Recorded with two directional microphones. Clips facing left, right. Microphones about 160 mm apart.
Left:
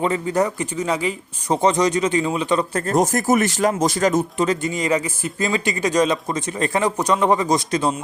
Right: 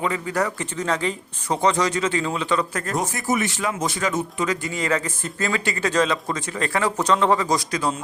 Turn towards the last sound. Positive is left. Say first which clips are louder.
# left 3 dB
turn(degrees=25)  # may be behind; listen again after turning